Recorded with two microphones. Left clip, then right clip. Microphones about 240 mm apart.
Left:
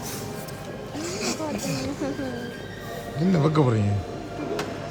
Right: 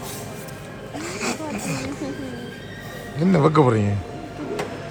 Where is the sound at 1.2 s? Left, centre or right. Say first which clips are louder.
Right 2 dB; centre.